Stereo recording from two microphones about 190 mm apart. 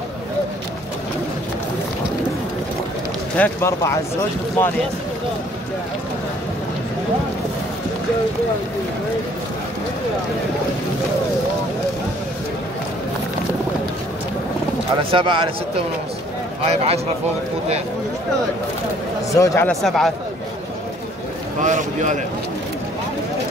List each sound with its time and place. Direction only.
3.3 s speech: 10° left (ahead or behind)
15.0 s a man's voice: 25° right (ahead or behind)
16.7 s speech: 35° right (ahead or behind)
19.3 s speech: 15° left (ahead or behind)
19.7 s speech: centre (ahead or behind)
21.5 s speech: 40° right (ahead or behind)